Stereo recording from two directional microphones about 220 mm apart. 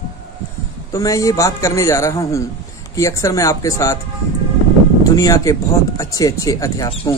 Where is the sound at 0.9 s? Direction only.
15° left (ahead or behind).